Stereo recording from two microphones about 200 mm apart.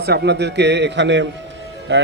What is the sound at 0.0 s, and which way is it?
A man's voice, 55° right (ahead or behind).